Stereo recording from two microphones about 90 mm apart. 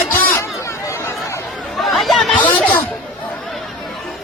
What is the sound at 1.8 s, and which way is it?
Chatter, centre (ahead or behind).